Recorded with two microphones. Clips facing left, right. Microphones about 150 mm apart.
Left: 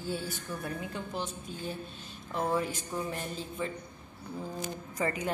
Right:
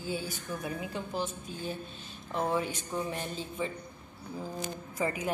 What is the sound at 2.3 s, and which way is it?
Speech, centre (ahead or behind).